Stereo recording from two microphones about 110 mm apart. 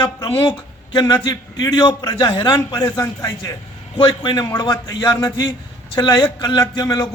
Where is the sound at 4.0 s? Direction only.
45° left (ahead or behind).